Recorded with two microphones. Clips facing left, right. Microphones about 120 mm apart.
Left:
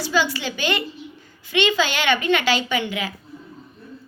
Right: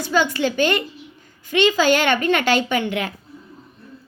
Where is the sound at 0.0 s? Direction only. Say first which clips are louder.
Right 3 dB; 50° right (ahead or behind).